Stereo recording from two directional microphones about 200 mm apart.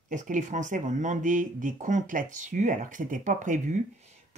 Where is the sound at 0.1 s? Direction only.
40° right (ahead or behind).